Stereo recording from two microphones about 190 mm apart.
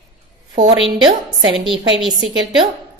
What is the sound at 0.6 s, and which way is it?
A woman's voice, 25° right (ahead or behind).